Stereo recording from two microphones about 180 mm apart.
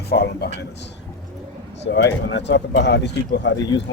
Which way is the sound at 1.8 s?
75° left (ahead or behind).